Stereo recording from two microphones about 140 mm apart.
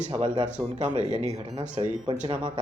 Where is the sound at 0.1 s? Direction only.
35° right (ahead or behind).